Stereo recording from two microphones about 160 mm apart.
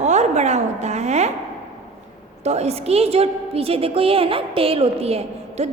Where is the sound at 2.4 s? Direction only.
40° right (ahead or behind).